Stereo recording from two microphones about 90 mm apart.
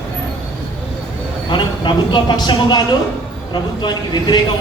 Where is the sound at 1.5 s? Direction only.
60° left (ahead or behind).